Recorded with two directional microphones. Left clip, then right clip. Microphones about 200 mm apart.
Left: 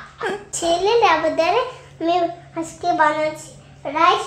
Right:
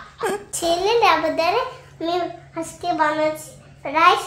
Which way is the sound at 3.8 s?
10° right (ahead or behind).